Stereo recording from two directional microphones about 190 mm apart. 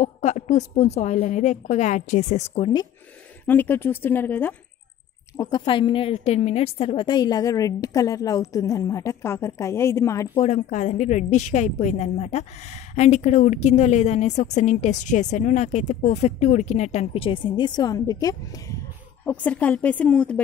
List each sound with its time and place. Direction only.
0.0 s a woman's voice: 35° left (ahead or behind)
3.4 s a woman's voice: 10° left (ahead or behind)
5.4 s a woman's voice: 25° left (ahead or behind)
10.3 s a woman's voice: 35° left (ahead or behind); by 20.4 s 5° left (ahead or behind)